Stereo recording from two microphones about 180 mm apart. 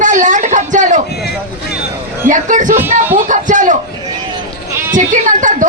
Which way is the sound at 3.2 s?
45° right (ahead or behind).